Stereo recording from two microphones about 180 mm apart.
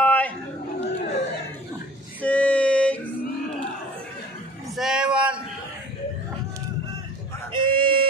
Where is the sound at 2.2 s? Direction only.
10° left (ahead or behind).